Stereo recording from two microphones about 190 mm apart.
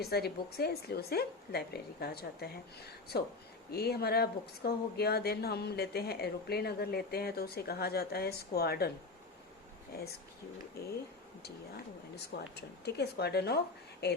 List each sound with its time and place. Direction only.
0.0 s speech: 55° left (ahead or behind)
10.8 s speech: 55° left (ahead or behind)
12.1 s speech: 60° left (ahead or behind)